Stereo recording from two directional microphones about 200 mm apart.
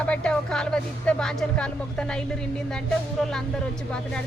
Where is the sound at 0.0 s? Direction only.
5° left (ahead or behind).